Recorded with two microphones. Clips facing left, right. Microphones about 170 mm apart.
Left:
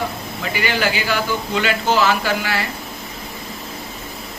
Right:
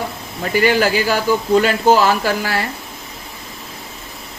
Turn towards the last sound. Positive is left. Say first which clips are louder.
# right 2 dB
turn(degrees=-40)  # may be behind; listen again after turning